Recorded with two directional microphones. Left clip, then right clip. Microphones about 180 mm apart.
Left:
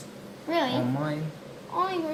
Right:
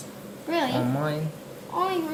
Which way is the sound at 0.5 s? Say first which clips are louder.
Right 1 dB; 15° left (ahead or behind).